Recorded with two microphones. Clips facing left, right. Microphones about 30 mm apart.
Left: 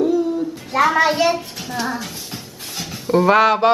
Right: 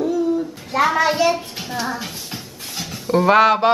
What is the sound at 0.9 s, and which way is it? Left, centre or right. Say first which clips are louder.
Speech: left 1 dB; centre.